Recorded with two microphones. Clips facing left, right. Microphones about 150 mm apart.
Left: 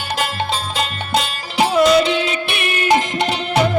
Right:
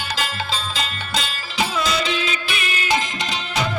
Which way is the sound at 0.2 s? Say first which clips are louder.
Left 6 dB; 55° left (ahead or behind).